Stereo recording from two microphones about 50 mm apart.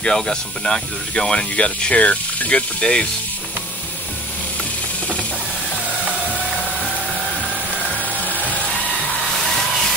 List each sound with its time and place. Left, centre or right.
0.0 s speech: centre
8.3 s music: left